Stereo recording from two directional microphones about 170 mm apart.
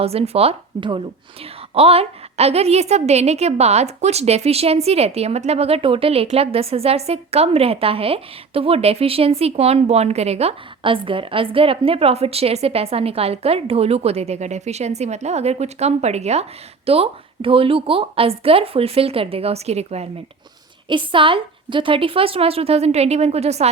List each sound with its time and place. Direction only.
0.0 s a woman's voice: 35° right (ahead or behind)